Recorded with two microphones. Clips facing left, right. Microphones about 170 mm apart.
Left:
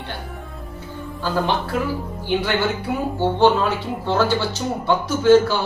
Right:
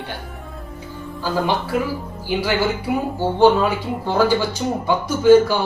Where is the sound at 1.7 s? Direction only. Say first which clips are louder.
Right 1 dB; 10° right (ahead or behind).